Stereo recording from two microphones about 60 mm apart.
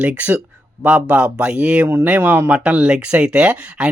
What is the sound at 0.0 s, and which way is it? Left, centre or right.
Speech, right.